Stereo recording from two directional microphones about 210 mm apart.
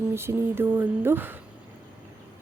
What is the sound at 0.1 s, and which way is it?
A woman's voice, 10° right (ahead or behind).